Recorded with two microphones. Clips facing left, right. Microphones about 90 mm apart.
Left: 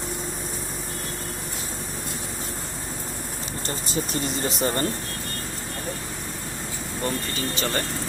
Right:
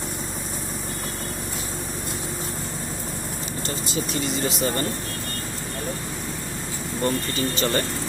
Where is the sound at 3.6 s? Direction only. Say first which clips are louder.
Even; 45° left (ahead or behind).